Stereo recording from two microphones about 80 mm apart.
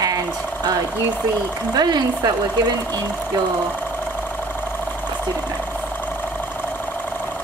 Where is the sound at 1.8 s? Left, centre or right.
Right.